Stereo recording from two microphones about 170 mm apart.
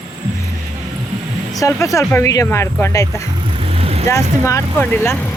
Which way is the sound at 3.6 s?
35° right (ahead or behind).